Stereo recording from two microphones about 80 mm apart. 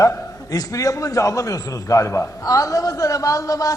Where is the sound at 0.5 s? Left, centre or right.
Left.